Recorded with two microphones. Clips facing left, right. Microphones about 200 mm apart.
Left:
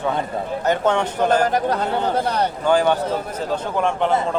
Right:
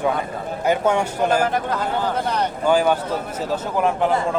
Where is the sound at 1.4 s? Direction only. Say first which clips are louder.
Left 2 dB; 40° left (ahead or behind).